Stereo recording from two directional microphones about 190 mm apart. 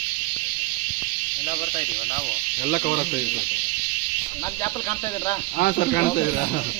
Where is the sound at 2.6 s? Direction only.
50° left (ahead or behind).